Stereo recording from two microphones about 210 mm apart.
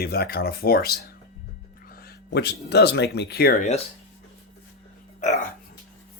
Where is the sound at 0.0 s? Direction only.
50° left (ahead or behind).